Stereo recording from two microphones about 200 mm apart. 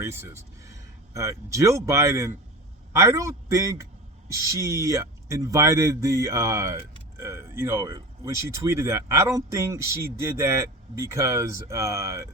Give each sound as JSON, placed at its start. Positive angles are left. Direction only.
{"t": 0.0, "sound": "speech", "side_deg": -10}